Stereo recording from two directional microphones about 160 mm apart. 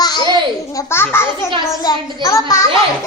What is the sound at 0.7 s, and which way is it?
A child's voice, 20° left (ahead or behind).